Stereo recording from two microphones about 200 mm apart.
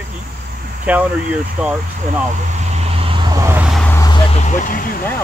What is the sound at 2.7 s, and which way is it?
Vehicle, 25° right (ahead or behind).